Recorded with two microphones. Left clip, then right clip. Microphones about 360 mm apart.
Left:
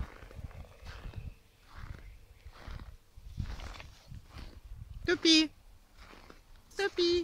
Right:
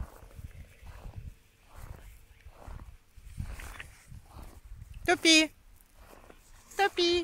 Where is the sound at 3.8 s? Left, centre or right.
Centre.